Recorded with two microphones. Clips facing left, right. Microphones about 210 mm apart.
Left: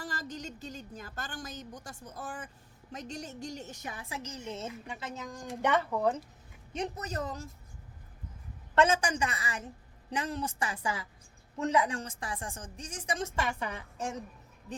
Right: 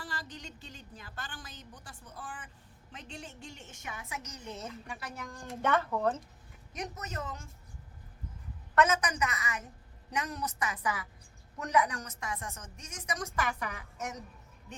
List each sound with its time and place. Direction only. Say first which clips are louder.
0.0 s a woman's voice: left 4 dB; 45° left (ahead or behind); by 6.1 s 10° left (ahead or behind)
6.7 s a woman's voice: left 5 dB; 30° left (ahead or behind)
8.7 s a woman's voice: left 2 dB; 30° left (ahead or behind)